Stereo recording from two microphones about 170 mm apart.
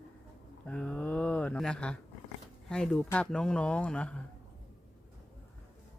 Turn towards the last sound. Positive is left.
turn(degrees=5)  # may be behind; listen again after turning